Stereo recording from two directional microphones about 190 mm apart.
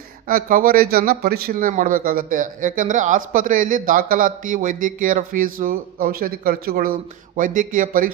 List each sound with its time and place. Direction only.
0.3 s speech: 45° right (ahead or behind)